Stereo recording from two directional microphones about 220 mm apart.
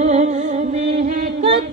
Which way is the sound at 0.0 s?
30° right (ahead or behind).